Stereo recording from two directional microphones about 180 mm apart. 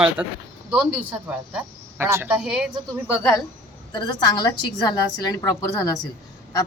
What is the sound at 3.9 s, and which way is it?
A woman's voice, 25° left (ahead or behind).